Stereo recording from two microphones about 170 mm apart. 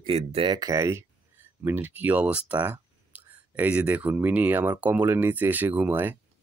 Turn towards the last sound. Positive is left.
turn(degrees=-10)  # may be behind; listen again after turning